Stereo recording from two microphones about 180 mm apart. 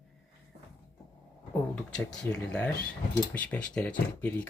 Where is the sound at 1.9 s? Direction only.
5° left (ahead or behind).